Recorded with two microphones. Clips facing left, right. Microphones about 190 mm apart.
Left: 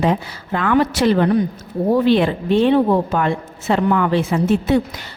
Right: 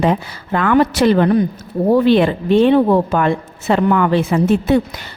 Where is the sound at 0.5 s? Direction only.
60° right (ahead or behind).